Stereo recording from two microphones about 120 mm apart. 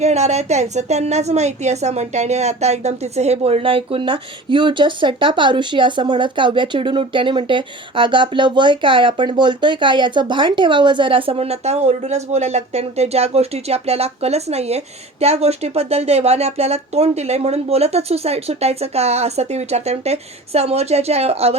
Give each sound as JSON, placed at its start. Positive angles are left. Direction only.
{"t": 0.0, "sound": "a woman's voice", "side_deg": -65}